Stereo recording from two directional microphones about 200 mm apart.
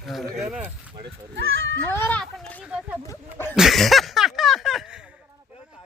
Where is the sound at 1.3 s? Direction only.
65° right (ahead or behind).